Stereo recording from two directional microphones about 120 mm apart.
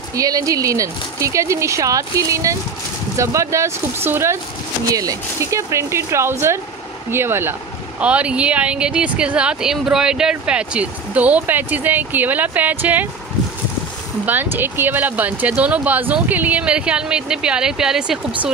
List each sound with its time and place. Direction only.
0.1 s speech: 30° right (ahead or behind)
14.2 s speech: 15° right (ahead or behind)